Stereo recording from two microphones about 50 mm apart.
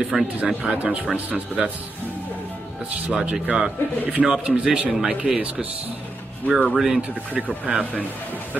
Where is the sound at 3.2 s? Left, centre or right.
Right.